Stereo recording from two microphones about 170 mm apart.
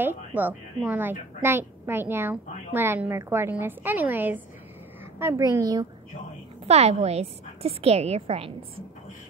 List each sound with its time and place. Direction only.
0.0 s a woman's voice: 10° right (ahead or behind)
6.6 s a woman's voice: 40° right (ahead or behind)